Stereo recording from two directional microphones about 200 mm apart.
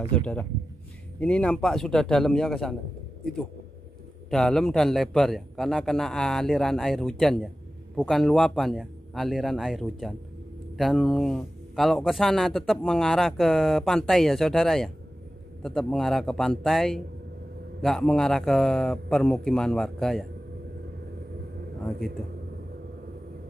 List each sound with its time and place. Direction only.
0.0 s a man's voice: 5° left (ahead or behind)
4.3 s speech: centre (ahead or behind)